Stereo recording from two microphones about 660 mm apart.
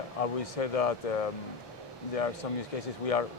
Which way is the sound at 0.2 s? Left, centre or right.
Left.